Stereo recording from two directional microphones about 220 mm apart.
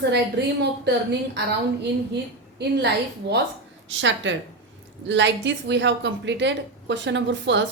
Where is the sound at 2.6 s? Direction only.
50° right (ahead or behind).